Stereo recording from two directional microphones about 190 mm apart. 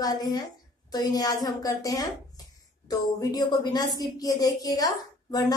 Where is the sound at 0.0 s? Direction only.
20° left (ahead or behind).